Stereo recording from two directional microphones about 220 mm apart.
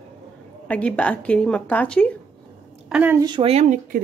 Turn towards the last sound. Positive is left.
turn(degrees=-35)  # may be behind; listen again after turning